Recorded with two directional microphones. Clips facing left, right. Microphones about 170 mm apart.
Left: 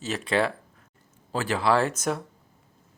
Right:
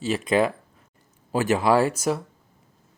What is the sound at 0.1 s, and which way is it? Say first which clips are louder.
Speech: right 4 dB; 10° right (ahead or behind).